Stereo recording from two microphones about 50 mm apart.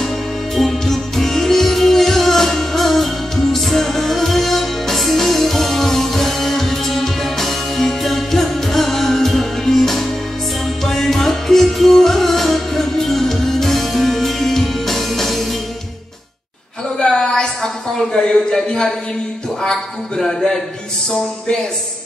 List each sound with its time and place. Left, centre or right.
0.6 s music: centre
17.0 s a sound: centre
19.6 s a man's voice: centre